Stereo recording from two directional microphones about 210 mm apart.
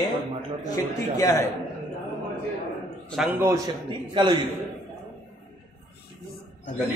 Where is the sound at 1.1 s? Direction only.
15° left (ahead or behind).